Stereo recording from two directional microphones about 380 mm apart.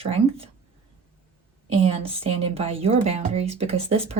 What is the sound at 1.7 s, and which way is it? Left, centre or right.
A woman's voice, centre.